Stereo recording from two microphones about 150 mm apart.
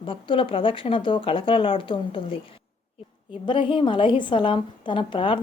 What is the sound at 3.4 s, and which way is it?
A woman's voice, 35° left (ahead or behind).